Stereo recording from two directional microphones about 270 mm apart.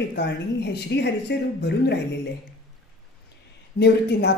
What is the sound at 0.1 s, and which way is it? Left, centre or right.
A woman's voice, left.